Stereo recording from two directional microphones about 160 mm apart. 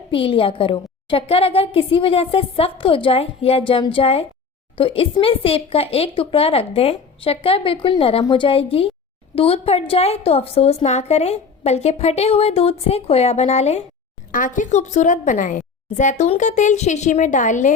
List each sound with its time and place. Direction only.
0.1 s a woman's voice: 35° left (ahead or behind)
14.3 s a woman's voice: 55° left (ahead or behind)